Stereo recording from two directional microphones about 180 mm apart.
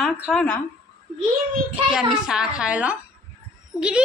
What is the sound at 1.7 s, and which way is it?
A child's voice, 5° right (ahead or behind).